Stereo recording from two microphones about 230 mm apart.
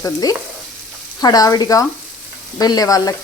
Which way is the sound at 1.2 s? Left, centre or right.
Centre.